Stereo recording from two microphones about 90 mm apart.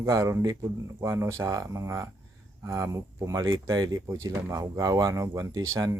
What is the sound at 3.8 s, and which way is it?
Speech, 45° right (ahead or behind).